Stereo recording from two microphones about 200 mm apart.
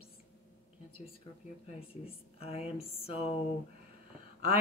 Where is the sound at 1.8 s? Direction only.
30° left (ahead or behind).